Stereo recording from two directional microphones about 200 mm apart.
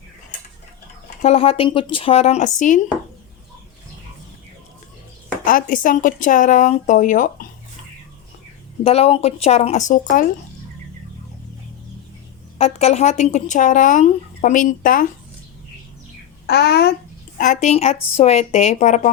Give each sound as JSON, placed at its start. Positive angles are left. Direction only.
{"t": 1.2, "sound": "speech", "side_deg": 30}
{"t": 5.5, "sound": "speech", "side_deg": 45}
{"t": 8.8, "sound": "speech", "side_deg": 30}
{"t": 12.5, "sound": "speech", "side_deg": 30}
{"t": 16.5, "sound": "a child's voice", "side_deg": 55}
{"t": 17.3, "sound": "speech", "side_deg": 40}